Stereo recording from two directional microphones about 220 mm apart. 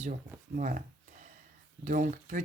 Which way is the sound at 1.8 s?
35° right (ahead or behind).